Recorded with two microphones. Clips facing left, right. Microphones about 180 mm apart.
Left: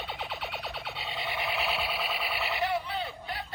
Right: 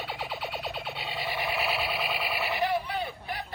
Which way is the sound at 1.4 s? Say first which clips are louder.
Right 2 dB; 5° right (ahead or behind).